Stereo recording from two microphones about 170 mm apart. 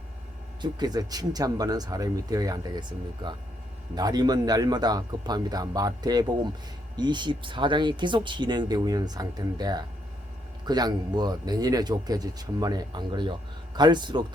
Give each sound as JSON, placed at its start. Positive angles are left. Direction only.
{"t": 0.6, "sound": "speech", "side_deg": -25}
{"t": 3.9, "sound": "speech", "side_deg": -25}